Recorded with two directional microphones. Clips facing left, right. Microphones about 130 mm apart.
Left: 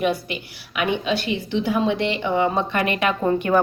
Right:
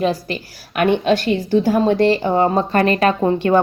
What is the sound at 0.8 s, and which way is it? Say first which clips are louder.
A woman's voice: right 7 dB; 50° right (ahead or behind).